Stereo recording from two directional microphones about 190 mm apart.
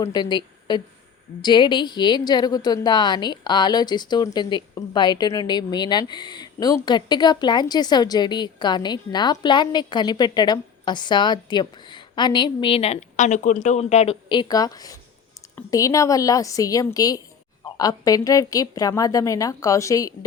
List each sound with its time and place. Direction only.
0.0 s a woman's voice: 20° left (ahead or behind)